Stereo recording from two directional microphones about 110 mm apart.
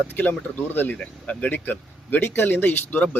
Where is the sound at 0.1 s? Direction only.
15° left (ahead or behind).